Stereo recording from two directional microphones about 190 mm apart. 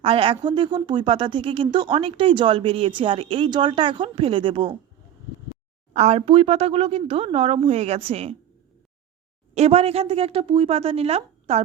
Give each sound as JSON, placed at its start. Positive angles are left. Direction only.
{"t": 0.0, "sound": "speech", "side_deg": -30}
{"t": 5.9, "sound": "speech", "side_deg": -35}
{"t": 9.6, "sound": "speech", "side_deg": -35}